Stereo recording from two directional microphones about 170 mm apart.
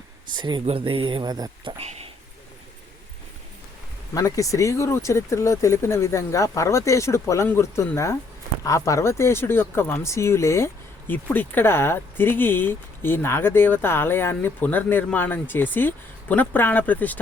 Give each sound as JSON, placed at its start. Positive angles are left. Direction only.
{"t": 0.3, "sound": "speech", "side_deg": -25}
{"t": 1.8, "sound": "speech", "side_deg": -40}
{"t": 4.1, "sound": "speech", "side_deg": 20}